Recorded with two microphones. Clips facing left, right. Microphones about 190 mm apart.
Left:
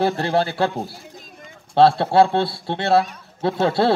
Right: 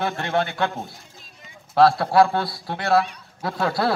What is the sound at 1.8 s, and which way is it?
A man's voice, 30° left (ahead or behind).